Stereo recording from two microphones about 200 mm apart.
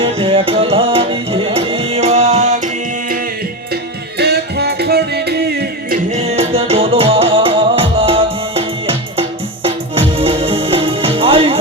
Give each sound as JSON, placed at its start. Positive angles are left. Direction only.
{"t": 0.0, "sound": "music", "side_deg": -25}
{"t": 4.2, "sound": "music", "side_deg": -55}
{"t": 6.1, "sound": "music", "side_deg": -30}